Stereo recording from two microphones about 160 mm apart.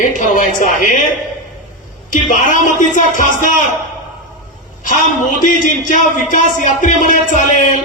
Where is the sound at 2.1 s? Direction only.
55° left (ahead or behind).